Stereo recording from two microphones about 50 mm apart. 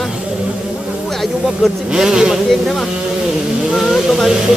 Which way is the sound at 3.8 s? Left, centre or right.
Centre.